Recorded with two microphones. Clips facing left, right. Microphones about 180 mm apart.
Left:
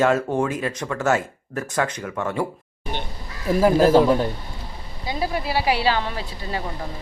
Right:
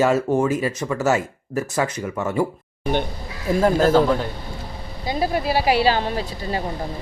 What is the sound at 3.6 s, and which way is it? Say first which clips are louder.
Speech: left 1 dB; 10° left (ahead or behind).